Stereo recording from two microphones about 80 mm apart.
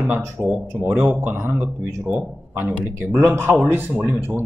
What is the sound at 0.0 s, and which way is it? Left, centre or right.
Speech, centre.